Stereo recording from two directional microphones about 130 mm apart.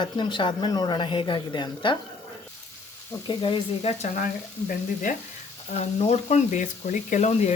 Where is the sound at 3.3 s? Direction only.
40° left (ahead or behind).